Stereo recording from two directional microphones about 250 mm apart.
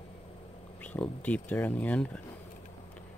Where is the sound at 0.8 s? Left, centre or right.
Centre.